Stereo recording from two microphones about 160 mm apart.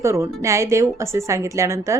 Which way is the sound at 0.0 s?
15° right (ahead or behind).